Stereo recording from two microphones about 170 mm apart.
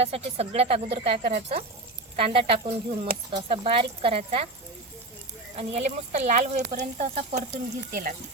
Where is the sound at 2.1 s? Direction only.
35° right (ahead or behind).